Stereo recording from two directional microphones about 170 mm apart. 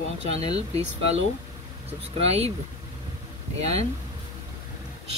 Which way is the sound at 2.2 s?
35° right (ahead or behind).